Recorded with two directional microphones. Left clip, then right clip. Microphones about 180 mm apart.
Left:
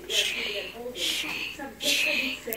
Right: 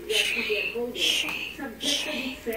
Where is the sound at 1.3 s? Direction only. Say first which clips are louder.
Right 1 dB; 15° left (ahead or behind).